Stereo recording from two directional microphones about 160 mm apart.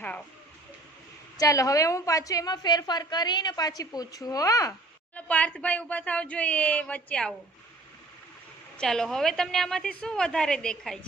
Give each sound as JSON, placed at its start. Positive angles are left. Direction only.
{"t": 1.4, "sound": "a woman's voice", "side_deg": 20}
{"t": 5.1, "sound": "speech", "side_deg": 10}
{"t": 8.8, "sound": "a woman's voice", "side_deg": 5}